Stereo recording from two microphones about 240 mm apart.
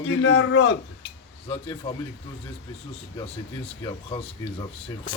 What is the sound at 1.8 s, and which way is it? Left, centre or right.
Speech, left.